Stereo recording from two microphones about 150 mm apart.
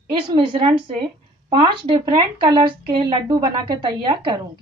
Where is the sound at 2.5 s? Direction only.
30° right (ahead or behind).